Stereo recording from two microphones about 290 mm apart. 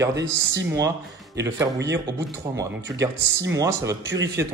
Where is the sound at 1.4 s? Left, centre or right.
Centre.